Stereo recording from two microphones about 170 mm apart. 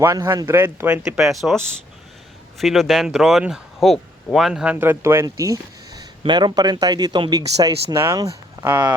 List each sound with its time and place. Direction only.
0.0 s speech: 15° right (ahead or behind); by 1.5 s centre (ahead or behind)
2.6 s speech: centre (ahead or behind)